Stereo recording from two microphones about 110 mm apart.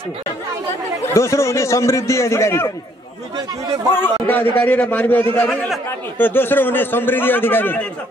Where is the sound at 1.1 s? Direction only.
25° left (ahead or behind).